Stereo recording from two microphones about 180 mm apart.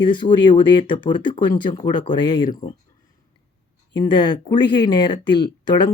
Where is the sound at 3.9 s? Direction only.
25° left (ahead or behind).